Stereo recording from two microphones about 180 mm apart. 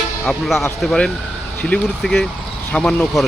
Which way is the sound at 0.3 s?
Centre (ahead or behind).